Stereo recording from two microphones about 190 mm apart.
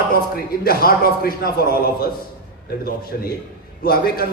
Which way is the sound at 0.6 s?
50° left (ahead or behind).